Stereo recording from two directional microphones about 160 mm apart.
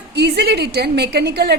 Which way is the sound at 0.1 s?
90° right.